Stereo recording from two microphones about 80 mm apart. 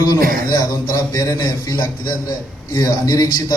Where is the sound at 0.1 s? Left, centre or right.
Left.